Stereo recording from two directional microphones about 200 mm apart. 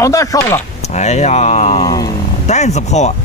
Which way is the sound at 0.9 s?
35° left (ahead or behind).